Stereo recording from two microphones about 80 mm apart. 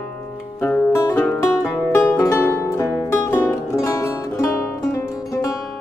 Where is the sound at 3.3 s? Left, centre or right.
Left.